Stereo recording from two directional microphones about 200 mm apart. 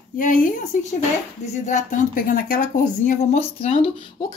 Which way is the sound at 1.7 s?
40° left (ahead or behind).